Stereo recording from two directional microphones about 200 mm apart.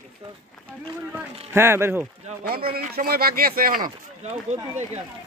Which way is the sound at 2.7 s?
50° right (ahead or behind).